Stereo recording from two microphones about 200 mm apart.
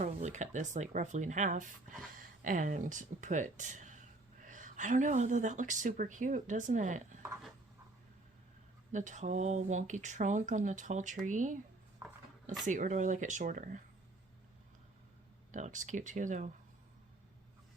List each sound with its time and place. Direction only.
0.0 s a woman's voice: 35° right (ahead or behind)
8.9 s a woman's voice: 40° right (ahead or behind)
12.6 s a woman's voice: 40° right (ahead or behind)
15.5 s a woman's voice: 40° right (ahead or behind)